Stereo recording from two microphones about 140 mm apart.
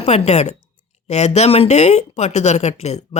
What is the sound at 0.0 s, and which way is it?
Speech, 50° left (ahead or behind).